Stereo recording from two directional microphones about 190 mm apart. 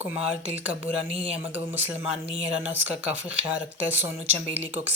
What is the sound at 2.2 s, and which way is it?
Speech, 30° right (ahead or behind).